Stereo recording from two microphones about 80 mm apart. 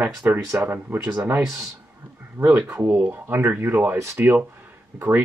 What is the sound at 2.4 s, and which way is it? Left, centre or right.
Speech, right.